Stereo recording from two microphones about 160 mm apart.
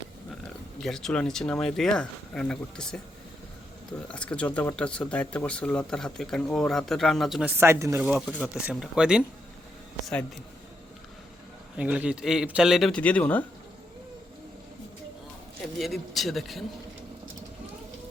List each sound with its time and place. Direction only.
0.8 s speech: 5° left (ahead or behind)
4.1 s speech: 5° left (ahead or behind)
7.4 s speech: 15° right (ahead or behind)
11.8 s speech: 10° right (ahead or behind); by 13.4 s 10° left (ahead or behind)
15.8 s speech: centre (ahead or behind)